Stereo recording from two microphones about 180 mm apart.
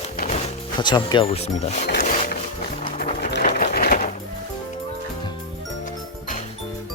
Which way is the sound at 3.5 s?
55° left (ahead or behind).